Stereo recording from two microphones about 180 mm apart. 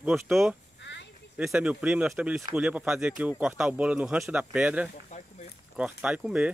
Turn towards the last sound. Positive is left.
turn(degrees=-5)  # may be behind; listen again after turning